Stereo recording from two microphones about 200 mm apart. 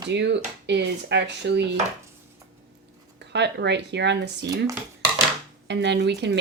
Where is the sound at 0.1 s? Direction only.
60° right (ahead or behind).